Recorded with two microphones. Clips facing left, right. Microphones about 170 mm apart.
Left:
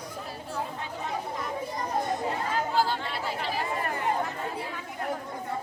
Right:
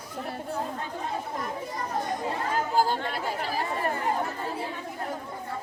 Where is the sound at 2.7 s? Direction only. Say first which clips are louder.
Right 4 dB; 45° right (ahead or behind).